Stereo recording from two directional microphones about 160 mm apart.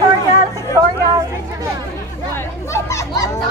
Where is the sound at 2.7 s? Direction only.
20° left (ahead or behind).